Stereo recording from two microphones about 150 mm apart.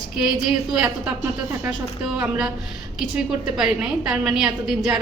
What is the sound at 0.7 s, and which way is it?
Speech, 5° right (ahead or behind).